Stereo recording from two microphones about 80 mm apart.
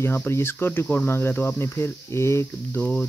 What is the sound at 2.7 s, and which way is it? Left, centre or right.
Speech, left.